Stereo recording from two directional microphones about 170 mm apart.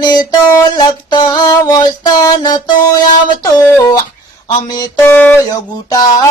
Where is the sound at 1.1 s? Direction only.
25° left (ahead or behind).